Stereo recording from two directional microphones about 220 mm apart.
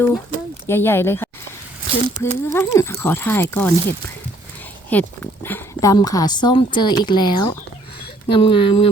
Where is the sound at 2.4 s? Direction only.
10° left (ahead or behind).